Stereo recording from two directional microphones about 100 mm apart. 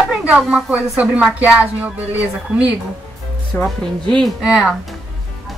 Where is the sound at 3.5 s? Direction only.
20° left (ahead or behind).